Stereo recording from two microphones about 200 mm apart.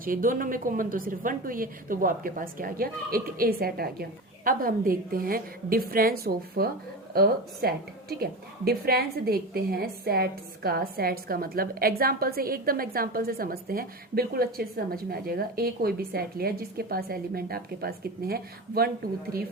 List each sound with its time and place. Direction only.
0.0 s a woman's voice: 45° right (ahead or behind)